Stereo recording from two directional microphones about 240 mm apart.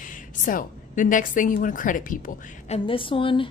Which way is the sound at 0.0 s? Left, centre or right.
Left.